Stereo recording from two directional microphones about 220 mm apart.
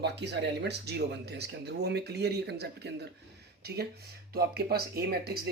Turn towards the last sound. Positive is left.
turn(degrees=-45)  # may be behind; listen again after turning